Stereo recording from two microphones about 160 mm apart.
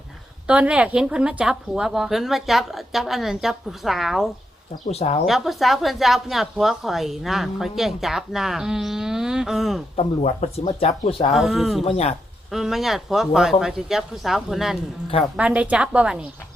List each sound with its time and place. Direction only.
0.4 s speech: 5° right (ahead or behind)
4.9 s speech: 40° left (ahead or behind)
5.2 s speech: centre (ahead or behind)
9.9 s speech: 40° left (ahead or behind)
11.3 s speech: centre (ahead or behind)
11.8 s speech: 40° left (ahead or behind)
12.5 s a woman's voice: centre (ahead or behind)